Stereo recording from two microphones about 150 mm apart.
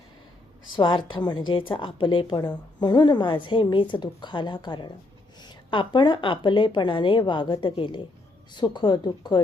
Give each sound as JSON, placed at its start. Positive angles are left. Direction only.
{"t": 0.8, "sound": "a woman's voice", "side_deg": 35}